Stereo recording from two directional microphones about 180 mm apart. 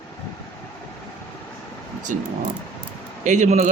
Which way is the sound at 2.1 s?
45° right (ahead or behind).